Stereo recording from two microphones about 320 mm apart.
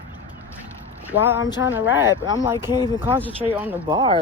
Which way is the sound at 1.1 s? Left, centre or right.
Centre.